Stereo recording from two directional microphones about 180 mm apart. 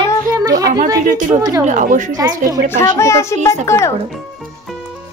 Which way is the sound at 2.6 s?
15° left (ahead or behind).